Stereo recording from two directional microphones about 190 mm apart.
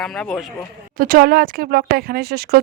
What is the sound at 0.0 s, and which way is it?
Speech, 5° left (ahead or behind).